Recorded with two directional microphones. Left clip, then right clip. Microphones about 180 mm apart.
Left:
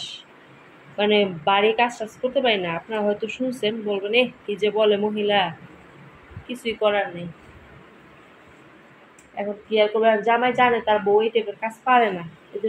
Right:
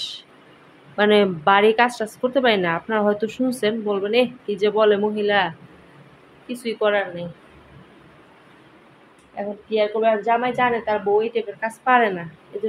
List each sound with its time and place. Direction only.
0.9 s a man's voice: 25° right (ahead or behind)
9.4 s speech: centre (ahead or behind)